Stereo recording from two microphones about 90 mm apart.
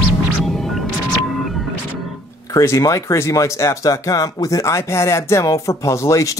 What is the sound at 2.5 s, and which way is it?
Speech, 40° left (ahead or behind).